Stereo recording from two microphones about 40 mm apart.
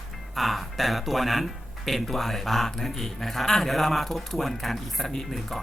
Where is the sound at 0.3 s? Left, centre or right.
Centre.